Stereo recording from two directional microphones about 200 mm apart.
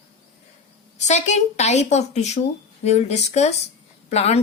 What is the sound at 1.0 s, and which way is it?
A woman's voice, 35° left (ahead or behind).